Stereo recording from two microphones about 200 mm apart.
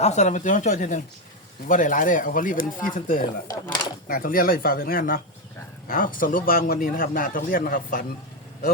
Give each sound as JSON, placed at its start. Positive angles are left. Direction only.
{"t": 0.0, "sound": "a man's voice", "side_deg": 35}
{"t": 3.4, "sound": "speech", "side_deg": 20}
{"t": 4.1, "sound": "a man's voice", "side_deg": 45}